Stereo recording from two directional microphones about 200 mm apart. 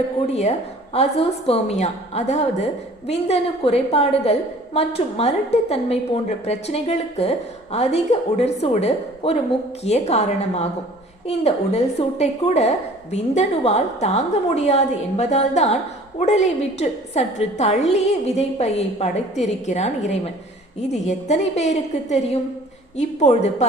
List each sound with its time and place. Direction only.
0.9 s a woman's voice: 30° left (ahead or behind)